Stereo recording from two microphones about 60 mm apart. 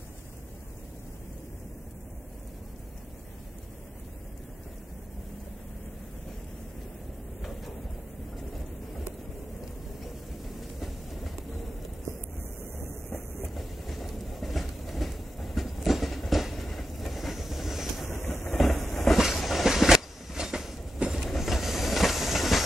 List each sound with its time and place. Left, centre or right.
13.6 s train: centre
18.0 s vehicle: left
18.9 s train: centre